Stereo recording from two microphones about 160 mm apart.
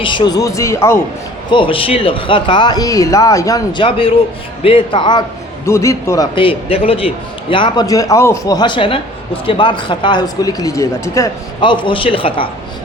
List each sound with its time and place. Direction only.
0.0 s a man's voice: 30° left (ahead or behind)
1.5 s a man's voice: 30° left (ahead or behind)
5.6 s a man's voice: 15° left (ahead or behind)
6.3 s a man's voice: 35° left (ahead or behind)
11.6 s a man's voice: 30° left (ahead or behind)